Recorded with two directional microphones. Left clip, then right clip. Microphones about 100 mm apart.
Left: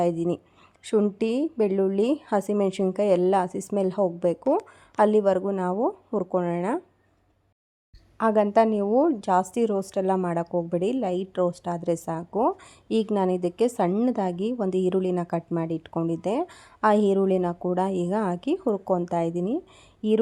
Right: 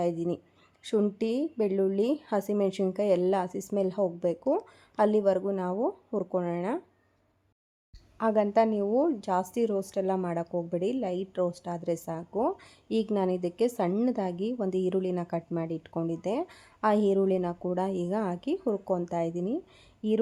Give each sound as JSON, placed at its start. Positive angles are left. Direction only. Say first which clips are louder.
{"t": 0.0, "sound": "speech", "louder": "left 5 dB", "side_deg": 45}
{"t": 8.2, "sound": "a woman's voice", "louder": "left 4 dB", "side_deg": 45}